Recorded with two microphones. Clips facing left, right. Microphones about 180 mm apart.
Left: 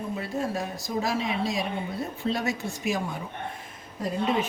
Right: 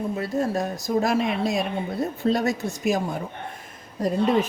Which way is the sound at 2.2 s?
40° right (ahead or behind).